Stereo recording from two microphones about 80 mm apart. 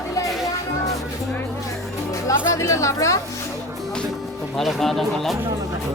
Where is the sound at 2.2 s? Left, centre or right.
Left.